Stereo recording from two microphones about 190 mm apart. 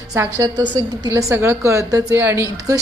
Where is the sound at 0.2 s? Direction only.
20° right (ahead or behind).